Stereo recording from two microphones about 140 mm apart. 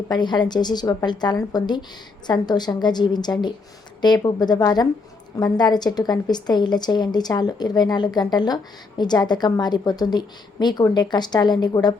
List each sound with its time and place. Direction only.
0.1 s a woman's voice: 30° left (ahead or behind)